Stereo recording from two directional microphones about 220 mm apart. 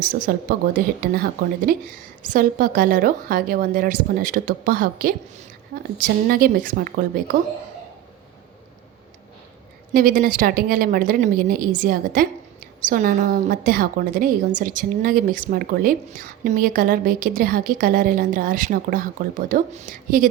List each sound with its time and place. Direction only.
0.0 s a woman's voice: 40° right (ahead or behind)
9.9 s a woman's voice: 40° right (ahead or behind)